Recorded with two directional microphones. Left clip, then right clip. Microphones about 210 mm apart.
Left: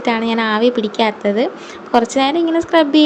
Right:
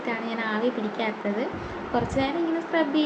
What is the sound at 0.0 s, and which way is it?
A woman's voice, 50° left (ahead or behind).